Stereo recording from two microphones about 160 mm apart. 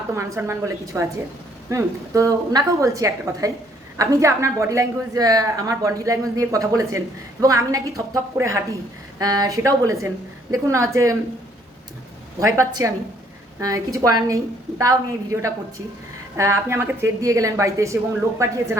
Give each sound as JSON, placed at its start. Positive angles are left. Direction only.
{"t": 0.1, "sound": "a woman's voice", "side_deg": -15}
{"t": 12.4, "sound": "a woman's voice", "side_deg": -20}